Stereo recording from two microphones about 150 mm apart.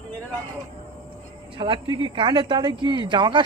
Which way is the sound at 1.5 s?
35° right (ahead or behind).